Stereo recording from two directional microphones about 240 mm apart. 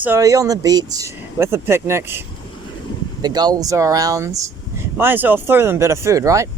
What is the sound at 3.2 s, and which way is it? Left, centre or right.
Speech, centre.